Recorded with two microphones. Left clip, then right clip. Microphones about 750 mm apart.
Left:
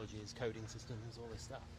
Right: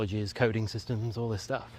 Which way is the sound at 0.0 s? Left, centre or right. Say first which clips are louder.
Right 15 dB; right.